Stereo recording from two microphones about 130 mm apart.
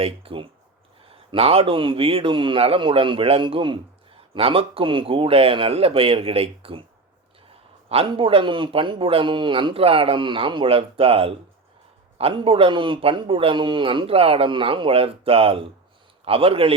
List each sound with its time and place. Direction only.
0.0 s a man's voice: 45° right (ahead or behind)
7.9 s a man's voice: 45° right (ahead or behind)